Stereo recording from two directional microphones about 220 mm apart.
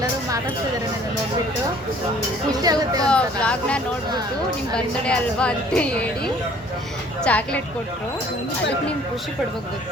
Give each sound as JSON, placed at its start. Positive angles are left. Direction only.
{"t": 2.5, "sound": "speech", "side_deg": -15}
{"t": 3.1, "sound": "a woman's voice", "side_deg": 5}